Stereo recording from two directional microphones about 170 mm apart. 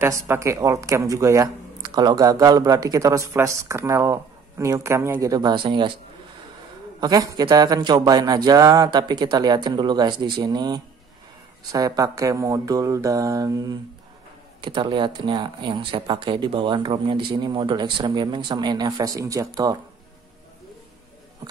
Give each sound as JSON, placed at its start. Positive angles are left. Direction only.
{"t": 0.0, "sound": "speech", "side_deg": -15}
{"t": 7.0, "sound": "speech", "side_deg": -20}